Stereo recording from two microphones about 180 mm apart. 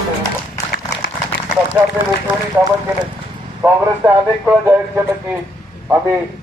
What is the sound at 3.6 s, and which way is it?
A man's voice, 15° right (ahead or behind).